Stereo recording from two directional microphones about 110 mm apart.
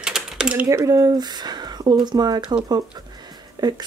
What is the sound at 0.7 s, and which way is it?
Speech, 30° right (ahead or behind).